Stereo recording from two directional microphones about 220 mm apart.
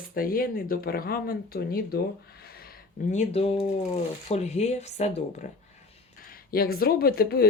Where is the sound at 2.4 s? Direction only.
45° left (ahead or behind).